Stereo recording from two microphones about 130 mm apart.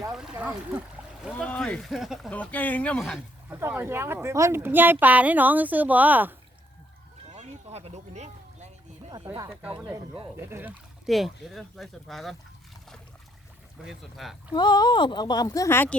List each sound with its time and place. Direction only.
0.1 s a sound: 5° right (ahead or behind)
1.4 s speech: 5° left (ahead or behind)
2.3 s speech: 10° left (ahead or behind)
3.0 s speech: 5° right (ahead or behind)
3.5 s a woman's voice: 15° right (ahead or behind)
7.3 s a sound: 55° right (ahead or behind)
9.1 s speech: 30° right (ahead or behind)
10.5 s a woman's voice: 15° right (ahead or behind)
11.0 s speech: centre (ahead or behind)
13.8 s speech: centre (ahead or behind)
14.5 s speech: 35° left (ahead or behind)